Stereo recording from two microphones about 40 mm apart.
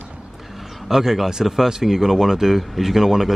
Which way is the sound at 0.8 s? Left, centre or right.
Centre.